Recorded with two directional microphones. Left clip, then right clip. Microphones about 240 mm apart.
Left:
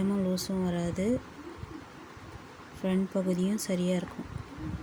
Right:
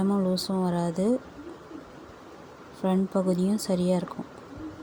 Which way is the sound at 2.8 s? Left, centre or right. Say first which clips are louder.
Right 5 dB; centre.